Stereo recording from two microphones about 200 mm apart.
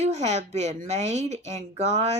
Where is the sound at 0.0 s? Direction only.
35° right (ahead or behind).